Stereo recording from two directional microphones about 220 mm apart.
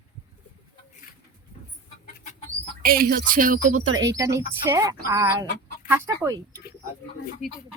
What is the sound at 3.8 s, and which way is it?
Speech, 65° right (ahead or behind).